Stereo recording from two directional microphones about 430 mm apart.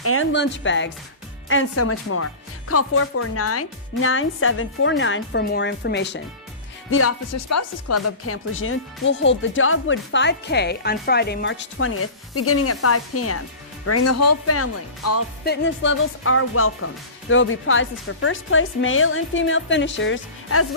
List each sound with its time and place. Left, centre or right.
0.0 s speech: left